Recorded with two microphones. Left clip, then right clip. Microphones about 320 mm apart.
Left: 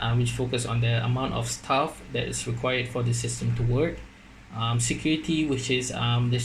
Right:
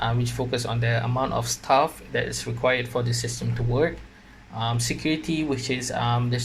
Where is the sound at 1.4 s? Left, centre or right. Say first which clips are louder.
Right 5 dB; centre.